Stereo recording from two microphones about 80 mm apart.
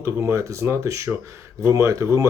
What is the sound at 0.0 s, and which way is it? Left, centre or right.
Speech, right.